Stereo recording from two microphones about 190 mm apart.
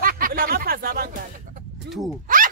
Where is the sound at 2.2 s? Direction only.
45° right (ahead or behind).